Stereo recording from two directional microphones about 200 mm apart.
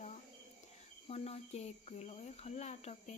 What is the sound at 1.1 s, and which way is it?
Speech, 30° left (ahead or behind).